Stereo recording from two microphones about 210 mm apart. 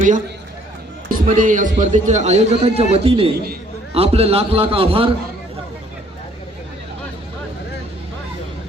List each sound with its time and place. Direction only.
1.0 s a man's voice: 40° right (ahead or behind)